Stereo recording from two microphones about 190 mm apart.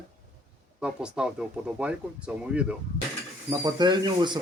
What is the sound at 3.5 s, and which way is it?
Speech, 20° right (ahead or behind).